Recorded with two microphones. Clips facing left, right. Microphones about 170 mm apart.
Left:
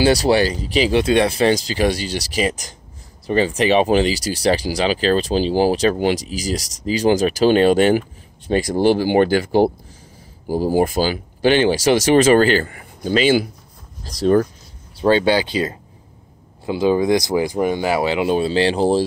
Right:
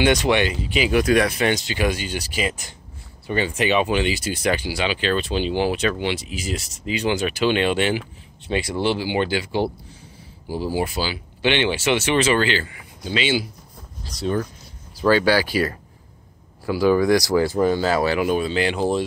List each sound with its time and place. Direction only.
0.0 s speech: 35° left (ahead or behind)
15.0 s speech: 25° left (ahead or behind)